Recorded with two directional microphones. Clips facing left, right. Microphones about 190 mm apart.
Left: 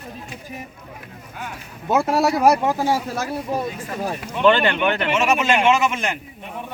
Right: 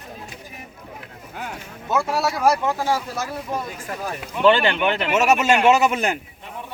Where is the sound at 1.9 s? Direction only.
20° left (ahead or behind).